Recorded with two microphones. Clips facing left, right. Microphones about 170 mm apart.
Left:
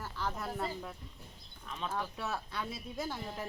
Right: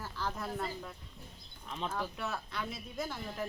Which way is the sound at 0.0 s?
Centre (ahead or behind).